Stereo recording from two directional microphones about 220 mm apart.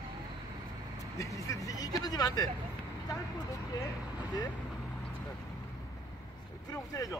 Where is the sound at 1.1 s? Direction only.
15° left (ahead or behind).